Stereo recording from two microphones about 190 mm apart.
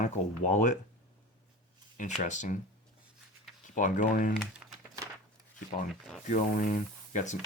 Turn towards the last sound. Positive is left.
turn(degrees=40)  # may be behind; listen again after turning